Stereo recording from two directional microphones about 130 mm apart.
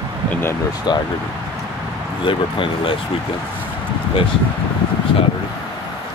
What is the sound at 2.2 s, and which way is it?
Speech, 40° left (ahead or behind).